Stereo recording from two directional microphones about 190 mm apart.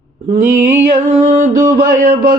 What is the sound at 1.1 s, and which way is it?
Mantra, 40° right (ahead or behind).